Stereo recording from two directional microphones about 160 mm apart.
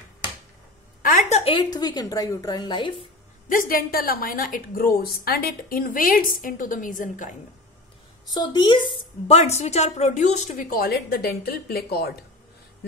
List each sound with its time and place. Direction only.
1.0 s a sound: 60° left (ahead or behind)
1.4 s a woman's voice: 35° left (ahead or behind)
3.4 s a woman's voice: 60° left (ahead or behind)
8.3 s a woman's voice: 25° left (ahead or behind)
9.4 s a woman's voice: 45° left (ahead or behind); by 12.1 s 75° left (ahead or behind)